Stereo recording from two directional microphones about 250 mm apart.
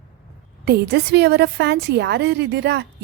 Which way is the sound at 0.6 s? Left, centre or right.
Right.